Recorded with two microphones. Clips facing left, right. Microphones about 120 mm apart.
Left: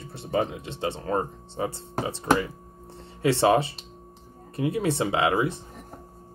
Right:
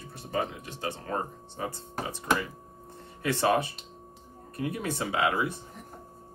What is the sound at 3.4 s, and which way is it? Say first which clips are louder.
Speech: left 4 dB; 25° left (ahead or behind).